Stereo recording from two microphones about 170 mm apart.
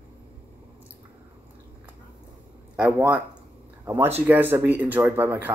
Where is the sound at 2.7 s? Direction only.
5° right (ahead or behind).